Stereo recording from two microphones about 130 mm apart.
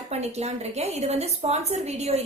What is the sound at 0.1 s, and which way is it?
A woman's voice, 55° right (ahead or behind).